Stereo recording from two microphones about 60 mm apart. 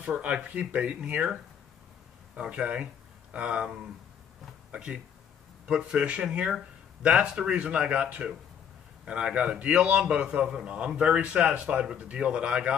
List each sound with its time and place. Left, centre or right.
0.0 s a man's voice: right